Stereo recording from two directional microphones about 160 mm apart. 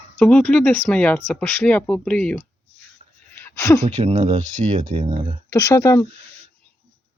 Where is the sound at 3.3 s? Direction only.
20° left (ahead or behind).